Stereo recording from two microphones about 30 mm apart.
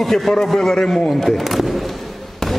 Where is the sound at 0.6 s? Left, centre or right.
Left.